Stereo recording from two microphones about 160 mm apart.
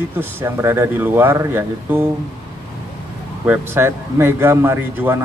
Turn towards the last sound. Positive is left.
turn(degrees=-15)  # may be behind; listen again after turning